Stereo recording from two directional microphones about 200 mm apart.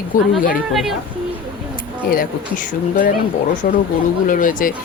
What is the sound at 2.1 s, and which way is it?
A woman's voice, 45° left (ahead or behind).